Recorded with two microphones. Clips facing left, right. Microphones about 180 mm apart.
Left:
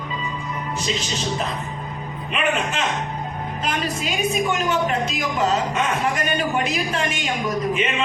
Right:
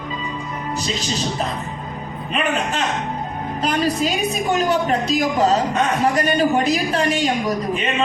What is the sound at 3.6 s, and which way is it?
A woman's voice, 35° right (ahead or behind).